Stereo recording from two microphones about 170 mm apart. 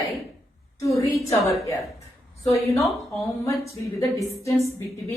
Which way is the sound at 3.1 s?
15° left (ahead or behind).